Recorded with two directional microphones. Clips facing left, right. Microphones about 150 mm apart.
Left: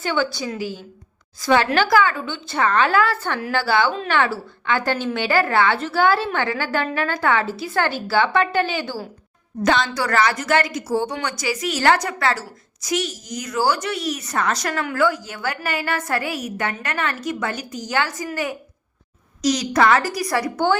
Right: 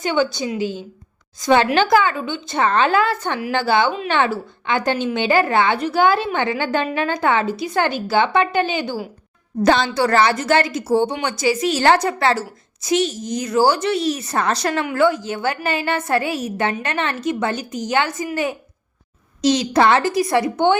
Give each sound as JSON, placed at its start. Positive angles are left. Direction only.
{"t": 0.0, "sound": "a woman's voice", "side_deg": -20}
{"t": 9.6, "sound": "a woman's voice", "side_deg": -30}